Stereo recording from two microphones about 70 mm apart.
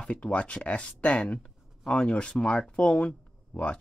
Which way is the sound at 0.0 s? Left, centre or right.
Centre.